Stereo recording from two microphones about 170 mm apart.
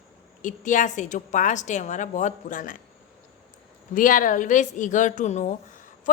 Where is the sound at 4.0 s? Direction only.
55° left (ahead or behind).